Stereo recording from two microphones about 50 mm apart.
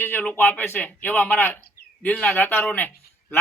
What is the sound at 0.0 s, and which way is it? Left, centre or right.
Speech, left.